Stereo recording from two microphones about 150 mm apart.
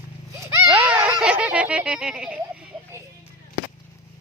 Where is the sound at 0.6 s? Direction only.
10° right (ahead or behind).